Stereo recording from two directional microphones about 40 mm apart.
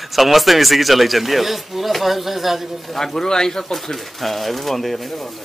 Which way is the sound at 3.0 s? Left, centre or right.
Centre.